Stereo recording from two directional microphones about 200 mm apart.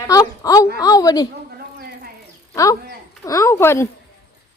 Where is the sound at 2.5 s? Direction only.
15° left (ahead or behind).